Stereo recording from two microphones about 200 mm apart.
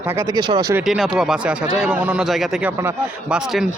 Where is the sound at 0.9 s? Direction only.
Centre (ahead or behind).